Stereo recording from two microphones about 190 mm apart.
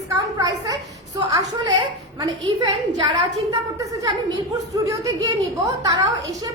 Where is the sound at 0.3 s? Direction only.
20° right (ahead or behind).